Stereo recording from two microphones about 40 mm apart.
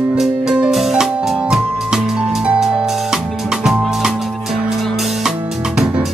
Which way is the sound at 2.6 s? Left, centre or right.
Centre.